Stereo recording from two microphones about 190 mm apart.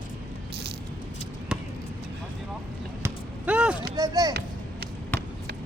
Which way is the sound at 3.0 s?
5° right (ahead or behind).